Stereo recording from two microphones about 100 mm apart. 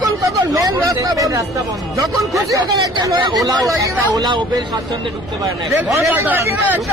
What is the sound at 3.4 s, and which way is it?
Speech, 35° right (ahead or behind).